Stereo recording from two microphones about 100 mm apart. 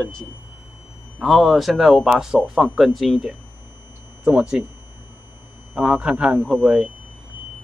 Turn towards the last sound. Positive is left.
turn(degrees=-10)  # may be behind; listen again after turning